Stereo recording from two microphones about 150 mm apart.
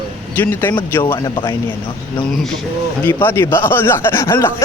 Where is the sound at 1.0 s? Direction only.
35° left (ahead or behind).